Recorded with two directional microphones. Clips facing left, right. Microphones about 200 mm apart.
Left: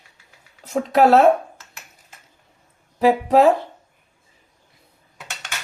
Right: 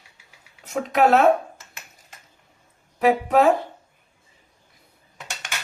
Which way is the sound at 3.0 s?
30° left (ahead or behind).